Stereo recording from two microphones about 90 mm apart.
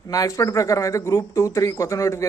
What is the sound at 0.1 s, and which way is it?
A man's voice, 40° left (ahead or behind).